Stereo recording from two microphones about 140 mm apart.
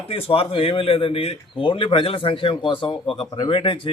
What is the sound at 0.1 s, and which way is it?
Speech, 45° left (ahead or behind).